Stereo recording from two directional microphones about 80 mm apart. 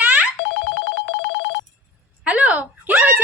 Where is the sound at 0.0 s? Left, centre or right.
Centre.